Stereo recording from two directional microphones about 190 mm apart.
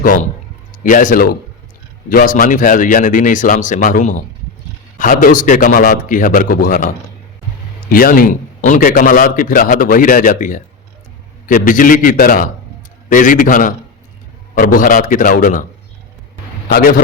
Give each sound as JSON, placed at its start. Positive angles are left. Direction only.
{"t": 0.0, "sound": "a man's voice", "side_deg": 45}